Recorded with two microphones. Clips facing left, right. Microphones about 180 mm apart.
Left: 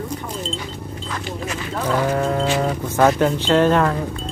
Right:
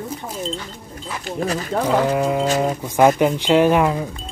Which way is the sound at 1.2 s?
40° right (ahead or behind).